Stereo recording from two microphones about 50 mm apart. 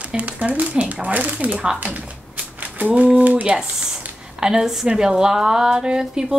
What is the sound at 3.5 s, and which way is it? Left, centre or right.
A woman's voice, centre.